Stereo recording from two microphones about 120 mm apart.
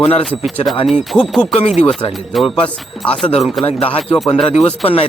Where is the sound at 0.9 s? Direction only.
Centre (ahead or behind).